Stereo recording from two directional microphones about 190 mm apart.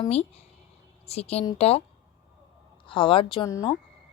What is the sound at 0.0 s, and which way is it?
A woman's voice, 35° left (ahead or behind).